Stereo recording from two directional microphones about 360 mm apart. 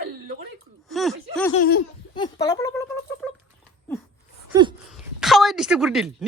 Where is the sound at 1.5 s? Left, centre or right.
Left.